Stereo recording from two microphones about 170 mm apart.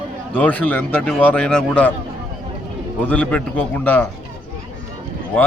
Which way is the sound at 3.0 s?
10° left (ahead or behind).